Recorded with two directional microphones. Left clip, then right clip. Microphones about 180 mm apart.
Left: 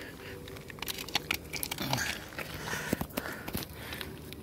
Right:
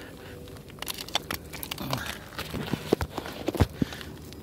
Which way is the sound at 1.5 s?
10° right (ahead or behind).